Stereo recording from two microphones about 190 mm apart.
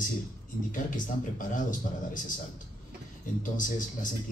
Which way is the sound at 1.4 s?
45° left (ahead or behind).